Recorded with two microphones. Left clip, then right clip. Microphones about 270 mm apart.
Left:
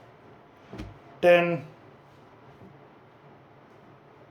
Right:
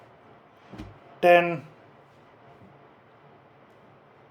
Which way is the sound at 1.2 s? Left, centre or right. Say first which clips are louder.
Right 1 dB; centre.